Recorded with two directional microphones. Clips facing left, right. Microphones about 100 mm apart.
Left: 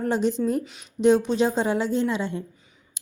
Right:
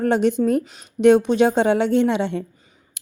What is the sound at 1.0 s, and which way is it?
A woman's voice, 60° right (ahead or behind).